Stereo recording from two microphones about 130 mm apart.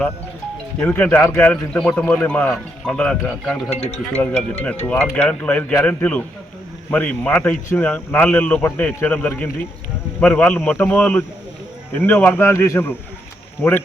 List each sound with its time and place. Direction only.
0.8 s a man's voice: 10° left (ahead or behind)
3.7 s speech: 55° left (ahead or behind)
4.1 s a man's voice: 15° left (ahead or behind)